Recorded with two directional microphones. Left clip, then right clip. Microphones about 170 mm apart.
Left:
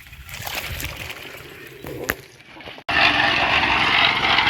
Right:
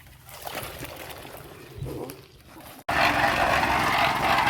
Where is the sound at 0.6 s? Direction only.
30° right (ahead or behind).